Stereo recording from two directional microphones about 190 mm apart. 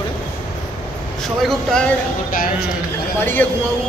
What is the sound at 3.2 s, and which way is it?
Speech, 10° left (ahead or behind).